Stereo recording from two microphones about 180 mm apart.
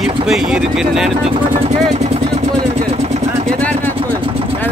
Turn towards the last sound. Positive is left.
turn(degrees=10)  # may be behind; listen again after turning